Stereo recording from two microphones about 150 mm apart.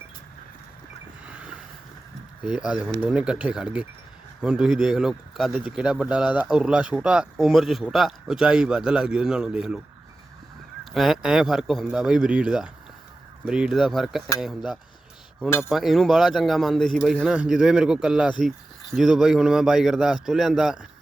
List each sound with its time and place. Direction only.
1.3 s vehicle: 10° right (ahead or behind)
2.4 s speech: 5° right (ahead or behind)
10.9 s speech: centre (ahead or behind)
15.4 s speech: 15° left (ahead or behind)
15.7 s speech: centre (ahead or behind)